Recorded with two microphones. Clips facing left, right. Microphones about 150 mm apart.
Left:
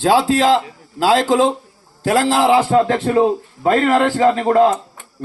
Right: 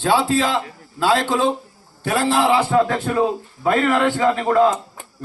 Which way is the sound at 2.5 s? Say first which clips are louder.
Left 3 dB; 35° left (ahead or behind).